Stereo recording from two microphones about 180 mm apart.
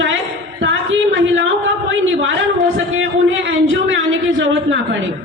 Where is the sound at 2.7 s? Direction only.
90° right.